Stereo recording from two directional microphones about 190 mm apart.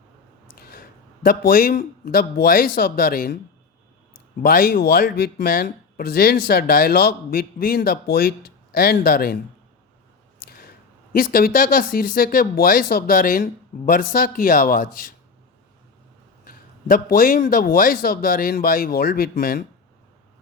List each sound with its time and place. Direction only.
0.5 s a man's voice: 50° left (ahead or behind)
4.4 s speech: 50° left (ahead or behind)
10.4 s biting: 50° left (ahead or behind)
11.1 s speech: 50° left (ahead or behind)
16.4 s speech: 50° left (ahead or behind)